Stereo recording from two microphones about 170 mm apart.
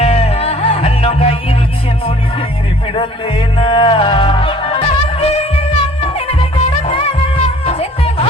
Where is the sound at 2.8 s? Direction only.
30° left (ahead or behind).